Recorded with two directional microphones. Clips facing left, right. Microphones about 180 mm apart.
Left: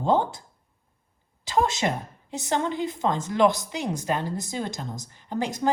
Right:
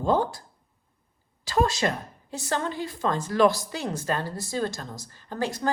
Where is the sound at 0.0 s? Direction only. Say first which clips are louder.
Left 1 dB; 20° left (ahead or behind).